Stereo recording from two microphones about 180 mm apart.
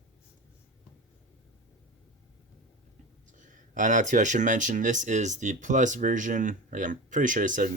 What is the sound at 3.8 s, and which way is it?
Speech, 45° right (ahead or behind).